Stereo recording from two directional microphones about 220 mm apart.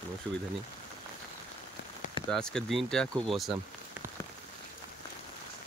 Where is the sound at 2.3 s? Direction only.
5° left (ahead or behind).